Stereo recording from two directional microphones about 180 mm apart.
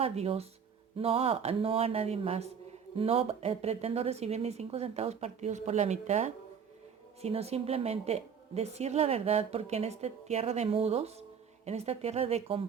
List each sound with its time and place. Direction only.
0.0 s a woman's voice: 35° right (ahead or behind)